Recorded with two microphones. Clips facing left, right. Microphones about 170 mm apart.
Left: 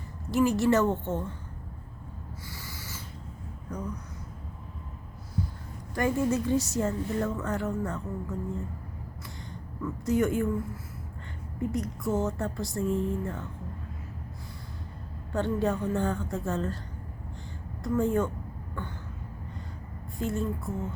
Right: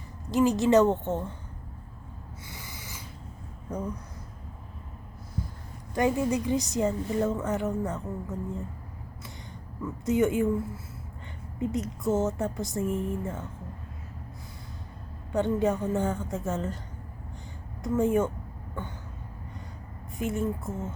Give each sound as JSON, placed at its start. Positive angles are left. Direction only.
{"t": 0.3, "sound": "a woman's voice", "side_deg": -20}
{"t": 2.5, "sound": "owl", "side_deg": -20}
{"t": 5.9, "sound": "a woman's voice", "side_deg": -20}
{"t": 9.8, "sound": "a woman's voice", "side_deg": -20}
{"t": 11.6, "sound": "a woman's voice", "side_deg": -20}
{"t": 15.3, "sound": "a woman's voice", "side_deg": -20}
{"t": 17.8, "sound": "a woman's voice", "side_deg": -20}
{"t": 20.1, "sound": "a woman's voice", "side_deg": -20}